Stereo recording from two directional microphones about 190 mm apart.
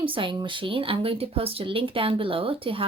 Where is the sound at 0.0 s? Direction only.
25° right (ahead or behind).